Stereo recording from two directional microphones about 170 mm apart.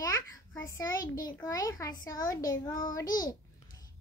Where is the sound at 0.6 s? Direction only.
20° left (ahead or behind).